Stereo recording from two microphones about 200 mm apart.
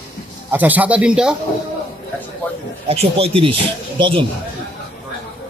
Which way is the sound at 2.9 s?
30° right (ahead or behind).